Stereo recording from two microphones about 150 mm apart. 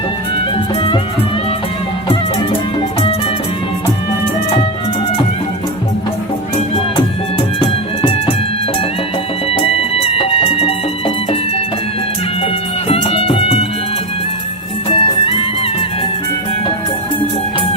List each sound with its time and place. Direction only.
0.5 s music: 35° left (ahead or behind)
6.9 s music: 40° left (ahead or behind)
10.2 s music: 40° left (ahead or behind)
12.9 s music: 40° left (ahead or behind)
14.8 s music: 35° left (ahead or behind)